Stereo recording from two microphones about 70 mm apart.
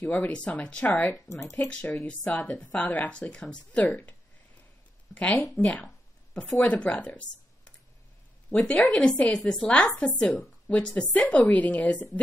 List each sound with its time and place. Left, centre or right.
0.0 s speech: left
1.3 s speech: left
1.7 s a woman's voice: centre
5.1 s a woman's voice: centre